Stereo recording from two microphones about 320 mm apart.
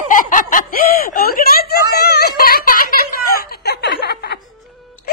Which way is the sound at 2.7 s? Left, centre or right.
Left.